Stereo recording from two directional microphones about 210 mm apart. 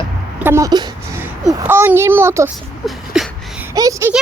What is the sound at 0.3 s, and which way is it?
A child's voice, 10° right (ahead or behind).